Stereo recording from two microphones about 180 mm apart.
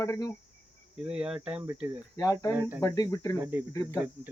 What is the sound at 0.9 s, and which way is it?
Speech, 5° right (ahead or behind).